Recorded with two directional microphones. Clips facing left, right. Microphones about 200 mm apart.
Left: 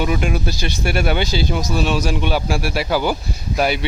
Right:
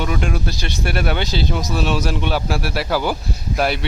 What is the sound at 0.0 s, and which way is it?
Speech, 10° left (ahead or behind).